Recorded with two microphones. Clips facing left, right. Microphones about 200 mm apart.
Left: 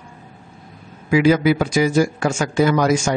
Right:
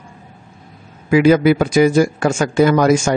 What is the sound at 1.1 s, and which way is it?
A man's voice, 55° right (ahead or behind).